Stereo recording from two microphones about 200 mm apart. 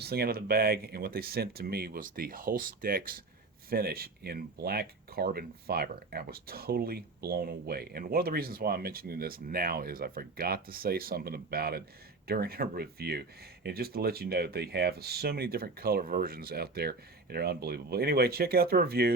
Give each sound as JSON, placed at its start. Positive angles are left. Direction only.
{"t": 0.0, "sound": "speech", "side_deg": -50}